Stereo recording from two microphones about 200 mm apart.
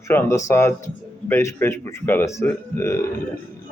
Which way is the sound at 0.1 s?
15° left (ahead or behind).